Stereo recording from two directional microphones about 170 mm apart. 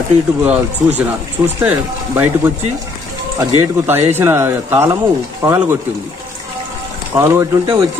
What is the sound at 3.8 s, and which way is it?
Speech, 15° right (ahead or behind).